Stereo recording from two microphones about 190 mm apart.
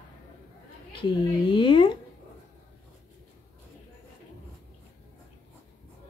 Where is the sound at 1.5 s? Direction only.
25° left (ahead or behind).